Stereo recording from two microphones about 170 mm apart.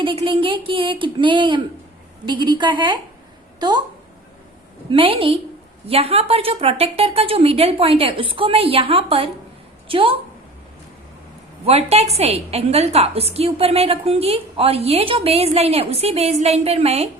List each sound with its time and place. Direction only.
0.0 s speech: 30° right (ahead or behind)
4.9 s a woman's voice: 30° right (ahead or behind)
11.6 s a woman's voice: 35° right (ahead or behind)